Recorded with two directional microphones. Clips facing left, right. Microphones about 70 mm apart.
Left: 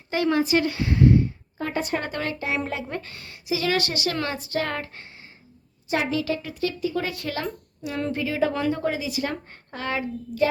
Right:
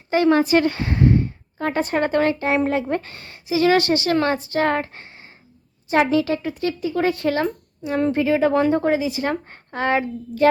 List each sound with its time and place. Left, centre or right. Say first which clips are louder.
0.1 s speech: right 7 dB; right
0.3 s a woman's voice: right 4 dB; right